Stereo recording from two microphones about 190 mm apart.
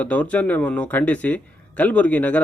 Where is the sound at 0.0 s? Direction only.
10° left (ahead or behind).